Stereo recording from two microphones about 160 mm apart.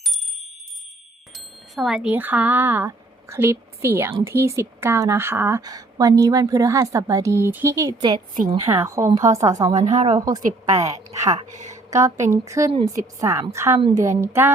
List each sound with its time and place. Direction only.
1.4 s a woman's voice: centre (ahead or behind); by 9.5 s 20° right (ahead or behind)
9.7 s a woman's voice: 50° right (ahead or behind)
10.1 s a woman's voice: 25° right (ahead or behind)
11.5 s speech: 50° right (ahead or behind)
11.9 s a woman's voice: 20° right (ahead or behind)